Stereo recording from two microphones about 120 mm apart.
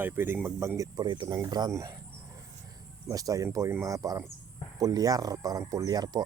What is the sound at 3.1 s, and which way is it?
Speech, 30° right (ahead or behind).